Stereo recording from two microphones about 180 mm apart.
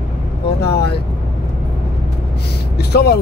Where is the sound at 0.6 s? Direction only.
65° left (ahead or behind).